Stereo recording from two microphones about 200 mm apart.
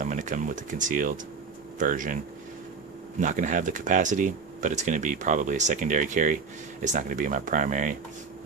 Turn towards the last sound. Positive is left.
turn(degrees=-40)  # may be behind; listen again after turning